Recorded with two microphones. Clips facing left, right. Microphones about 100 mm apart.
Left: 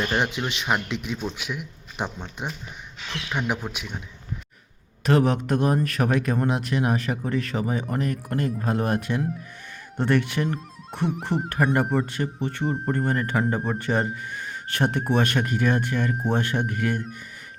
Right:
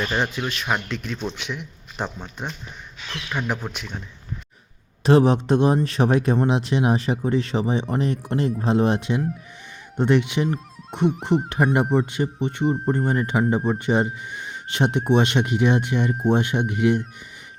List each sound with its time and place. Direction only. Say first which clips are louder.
0.0 s speech: even; 15° left (ahead or behind)
5.0 s a man's voice: right 4 dB; 30° right (ahead or behind); by 17.0 s 15° right (ahead or behind)